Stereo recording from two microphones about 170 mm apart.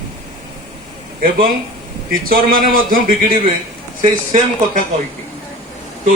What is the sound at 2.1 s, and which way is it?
Speech, 60° right (ahead or behind).